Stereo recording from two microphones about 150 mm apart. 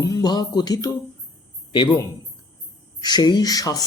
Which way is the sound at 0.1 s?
25° left (ahead or behind).